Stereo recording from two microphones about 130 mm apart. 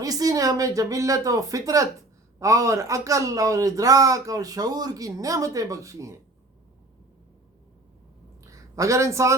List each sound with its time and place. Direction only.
0.0 s speech: 25° right (ahead or behind)
8.7 s speech: 25° right (ahead or behind)